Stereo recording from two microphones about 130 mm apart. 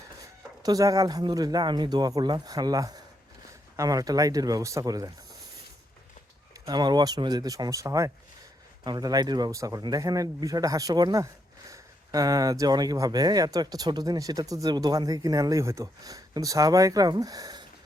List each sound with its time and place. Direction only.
0.6 s a man's voice: 30° right (ahead or behind)
6.5 s a man's voice: 30° right (ahead or behind)